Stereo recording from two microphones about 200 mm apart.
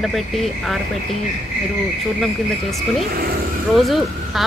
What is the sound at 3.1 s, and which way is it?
Speech, 50° right (ahead or behind).